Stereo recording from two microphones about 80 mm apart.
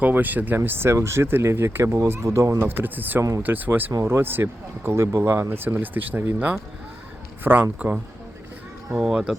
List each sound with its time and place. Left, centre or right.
0.0 s speech: right
2.6 s speech: right
9.0 s speech: centre